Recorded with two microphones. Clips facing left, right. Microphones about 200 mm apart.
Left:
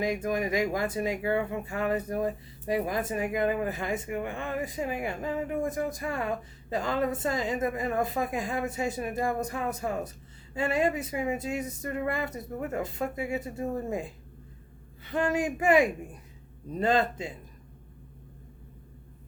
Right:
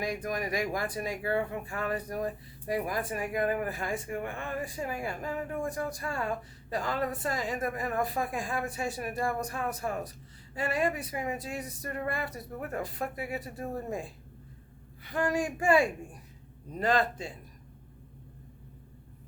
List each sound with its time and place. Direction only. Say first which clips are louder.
0.0 s speech: left 4 dB; 25° left (ahead or behind)